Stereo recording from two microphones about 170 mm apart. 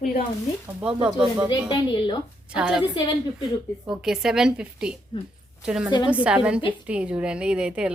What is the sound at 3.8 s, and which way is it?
A woman's voice, 5° right (ahead or behind).